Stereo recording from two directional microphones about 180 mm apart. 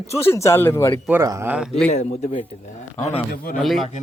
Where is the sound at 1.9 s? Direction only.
35° left (ahead or behind).